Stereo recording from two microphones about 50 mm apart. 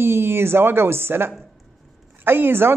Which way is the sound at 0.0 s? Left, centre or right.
Right.